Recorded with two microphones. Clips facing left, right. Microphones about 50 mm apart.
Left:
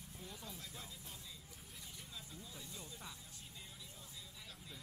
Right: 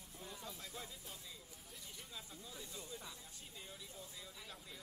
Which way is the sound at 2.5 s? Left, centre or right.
Centre.